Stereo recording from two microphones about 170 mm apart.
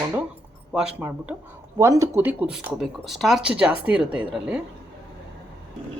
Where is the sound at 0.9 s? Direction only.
10° right (ahead or behind).